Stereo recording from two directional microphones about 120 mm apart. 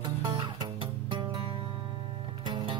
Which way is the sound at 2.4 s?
40° right (ahead or behind).